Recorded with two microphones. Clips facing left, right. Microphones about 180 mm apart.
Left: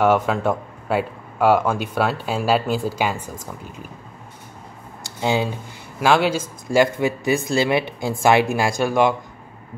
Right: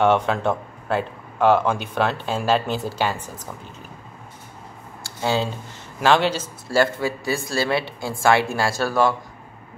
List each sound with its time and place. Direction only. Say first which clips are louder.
0.0 s speech: left 1 dB; 5° left (ahead or behind)
5.0 s speech: left 2 dB; 15° left (ahead or behind)